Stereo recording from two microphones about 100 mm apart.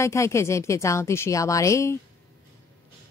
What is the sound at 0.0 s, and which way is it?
A woman's voice, 30° left (ahead or behind).